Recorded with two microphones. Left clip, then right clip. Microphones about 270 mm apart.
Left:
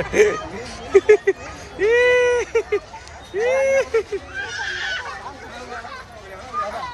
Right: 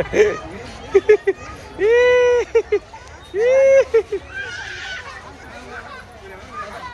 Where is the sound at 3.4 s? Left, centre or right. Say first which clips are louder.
Right 5 dB; left.